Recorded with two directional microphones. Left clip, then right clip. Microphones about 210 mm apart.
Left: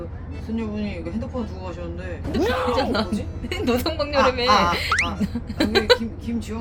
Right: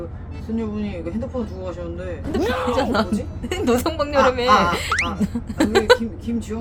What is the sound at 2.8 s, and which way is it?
Speech, 15° right (ahead or behind).